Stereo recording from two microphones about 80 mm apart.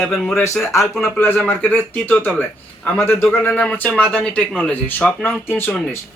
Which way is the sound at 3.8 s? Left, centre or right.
Centre.